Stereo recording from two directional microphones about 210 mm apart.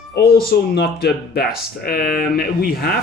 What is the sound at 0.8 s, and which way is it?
Speech, 45° left (ahead or behind).